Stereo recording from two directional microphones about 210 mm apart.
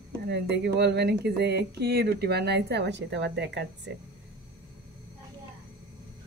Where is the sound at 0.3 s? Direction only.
55° right (ahead or behind).